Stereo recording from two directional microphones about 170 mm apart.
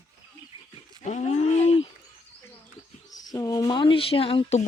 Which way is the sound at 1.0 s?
40° left (ahead or behind).